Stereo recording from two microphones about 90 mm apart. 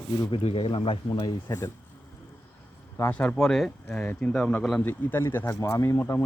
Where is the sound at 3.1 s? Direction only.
10° left (ahead or behind); by 6.1 s 35° left (ahead or behind).